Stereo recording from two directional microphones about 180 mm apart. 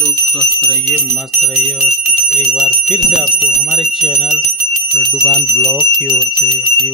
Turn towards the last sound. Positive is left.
turn(degrees=0)  # may be behind; listen again after turning